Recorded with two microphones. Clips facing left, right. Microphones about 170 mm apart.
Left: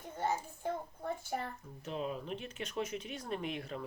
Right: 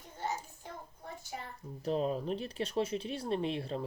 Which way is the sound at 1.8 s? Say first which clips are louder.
Right 7 dB; 35° right (ahead or behind).